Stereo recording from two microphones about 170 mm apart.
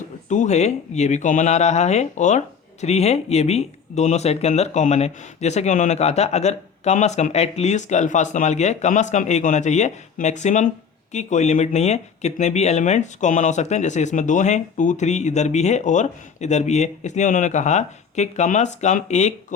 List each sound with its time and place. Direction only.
0.3 s speech: 45° left (ahead or behind)